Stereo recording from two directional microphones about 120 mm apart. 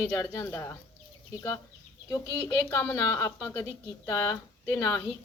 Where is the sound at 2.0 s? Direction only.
25° left (ahead or behind).